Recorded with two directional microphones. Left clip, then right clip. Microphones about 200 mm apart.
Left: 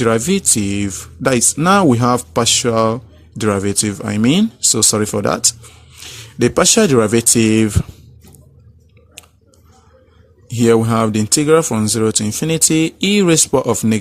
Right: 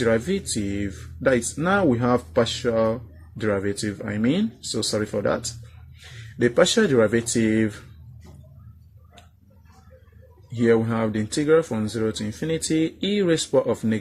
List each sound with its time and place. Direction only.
0.0 s speech: 50° left (ahead or behind)
6.4 s speech: 45° left (ahead or behind)
10.6 s speech: 50° left (ahead or behind)